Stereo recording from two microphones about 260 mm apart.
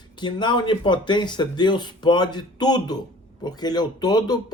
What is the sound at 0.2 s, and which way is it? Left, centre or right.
Speech, centre.